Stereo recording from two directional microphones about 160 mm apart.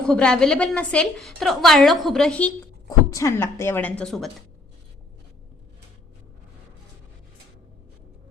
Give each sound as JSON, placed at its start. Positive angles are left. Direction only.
{"t": 0.0, "sound": "a woman's voice", "side_deg": 5}
{"t": 3.1, "sound": "a woman's voice", "side_deg": 20}